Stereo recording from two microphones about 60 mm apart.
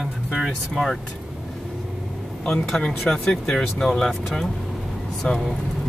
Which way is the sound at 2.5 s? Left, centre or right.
Centre.